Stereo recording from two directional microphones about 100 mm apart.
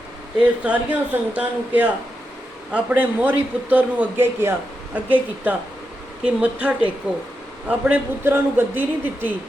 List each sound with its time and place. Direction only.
0.3 s a man's voice: 15° right (ahead or behind)